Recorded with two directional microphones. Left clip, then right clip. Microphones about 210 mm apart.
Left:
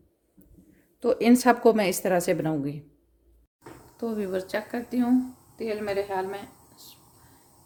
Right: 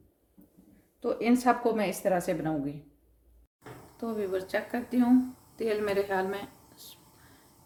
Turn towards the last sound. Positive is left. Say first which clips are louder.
# left 1 dB
turn(degrees=0)  # may be behind; listen again after turning